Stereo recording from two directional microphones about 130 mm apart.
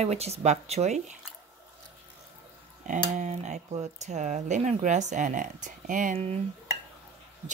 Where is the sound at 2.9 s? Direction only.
75° right (ahead or behind); by 6.1 s 90° right.